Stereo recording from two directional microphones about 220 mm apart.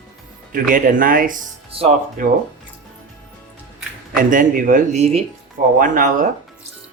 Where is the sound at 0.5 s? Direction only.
40° right (ahead or behind).